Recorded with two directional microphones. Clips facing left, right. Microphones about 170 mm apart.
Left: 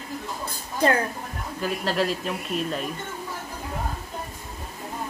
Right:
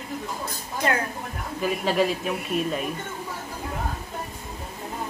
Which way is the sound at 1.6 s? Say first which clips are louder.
Right 2 dB; 5° right (ahead or behind).